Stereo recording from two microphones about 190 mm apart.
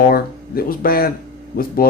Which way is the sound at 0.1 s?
50° left (ahead or behind).